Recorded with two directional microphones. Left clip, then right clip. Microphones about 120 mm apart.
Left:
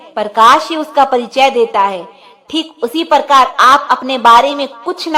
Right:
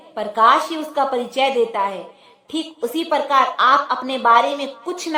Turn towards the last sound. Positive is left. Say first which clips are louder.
# left 7 dB
turn(degrees=35)  # may be behind; listen again after turning